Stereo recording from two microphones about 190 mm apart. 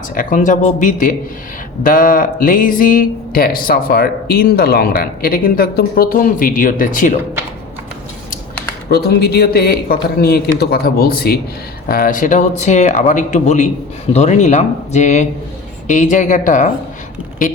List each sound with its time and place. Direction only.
0.1 s speech: 45° left (ahead or behind)
8.9 s speech: 55° left (ahead or behind)